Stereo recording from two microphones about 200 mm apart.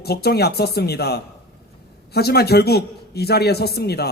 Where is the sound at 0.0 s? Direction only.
50° left (ahead or behind).